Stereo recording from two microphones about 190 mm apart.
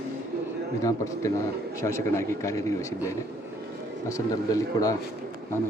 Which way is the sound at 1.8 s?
15° left (ahead or behind).